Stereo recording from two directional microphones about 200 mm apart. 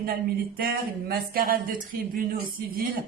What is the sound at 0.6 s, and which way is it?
A man's voice, 50° right (ahead or behind).